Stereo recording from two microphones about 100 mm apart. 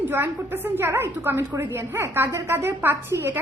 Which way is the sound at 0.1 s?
20° right (ahead or behind).